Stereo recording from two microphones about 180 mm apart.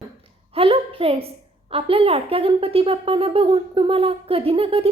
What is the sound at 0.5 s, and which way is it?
A woman's voice, 30° right (ahead or behind).